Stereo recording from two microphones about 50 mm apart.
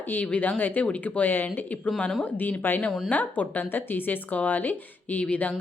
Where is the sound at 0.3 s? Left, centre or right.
Left.